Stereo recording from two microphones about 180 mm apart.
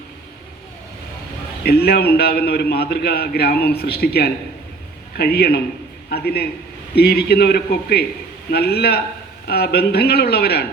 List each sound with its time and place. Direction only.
1.6 s a man's voice: 60° left (ahead or behind)